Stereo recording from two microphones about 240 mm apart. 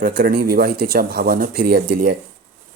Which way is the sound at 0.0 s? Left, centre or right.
Right.